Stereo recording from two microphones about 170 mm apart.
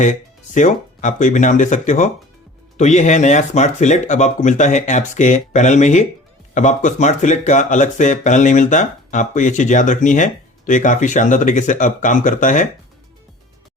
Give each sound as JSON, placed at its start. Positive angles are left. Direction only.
{"t": 0.0, "sound": "speech", "side_deg": 45}